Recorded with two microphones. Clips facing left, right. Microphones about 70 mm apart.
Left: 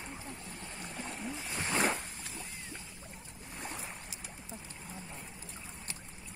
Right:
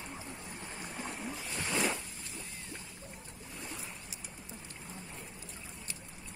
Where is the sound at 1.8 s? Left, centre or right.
Left.